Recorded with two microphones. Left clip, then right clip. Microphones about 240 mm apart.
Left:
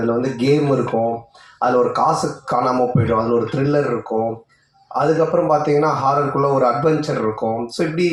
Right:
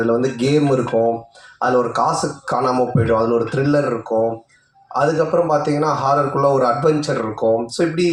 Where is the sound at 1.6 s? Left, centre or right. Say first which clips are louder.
Left 1 dB; right.